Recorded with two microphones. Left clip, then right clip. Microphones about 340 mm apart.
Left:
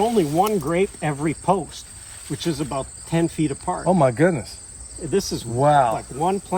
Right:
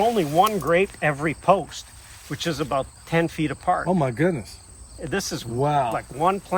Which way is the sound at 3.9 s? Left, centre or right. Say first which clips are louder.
Left 5 dB; centre.